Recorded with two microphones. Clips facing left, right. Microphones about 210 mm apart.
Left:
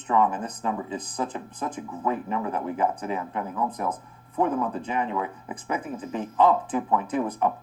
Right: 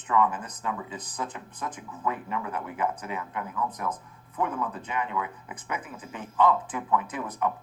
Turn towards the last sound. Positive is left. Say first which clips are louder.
# left 4 dB
turn(degrees=30)  # may be behind; listen again after turning